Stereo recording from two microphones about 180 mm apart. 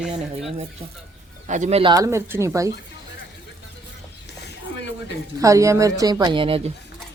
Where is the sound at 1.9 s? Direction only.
15° right (ahead or behind).